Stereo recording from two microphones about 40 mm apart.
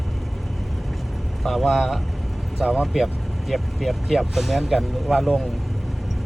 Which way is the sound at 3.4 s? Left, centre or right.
Centre.